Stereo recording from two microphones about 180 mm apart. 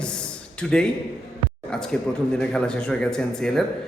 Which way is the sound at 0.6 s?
5° left (ahead or behind).